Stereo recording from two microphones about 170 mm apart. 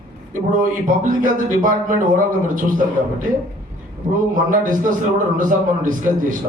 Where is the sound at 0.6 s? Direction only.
50° right (ahead or behind).